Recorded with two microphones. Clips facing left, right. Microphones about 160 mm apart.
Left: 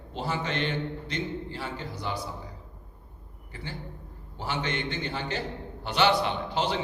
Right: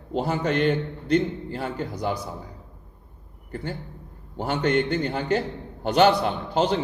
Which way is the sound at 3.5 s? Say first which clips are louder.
Right 7 dB; 50° right (ahead or behind).